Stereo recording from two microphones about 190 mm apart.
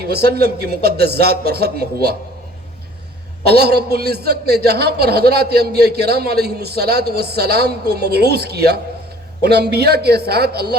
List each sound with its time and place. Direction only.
0.0 s a man's voice: 55° right (ahead or behind)
3.4 s a man's voice: 55° right (ahead or behind)